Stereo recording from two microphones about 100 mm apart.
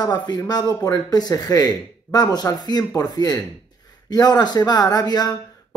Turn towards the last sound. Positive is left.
turn(degrees=40)  # may be behind; listen again after turning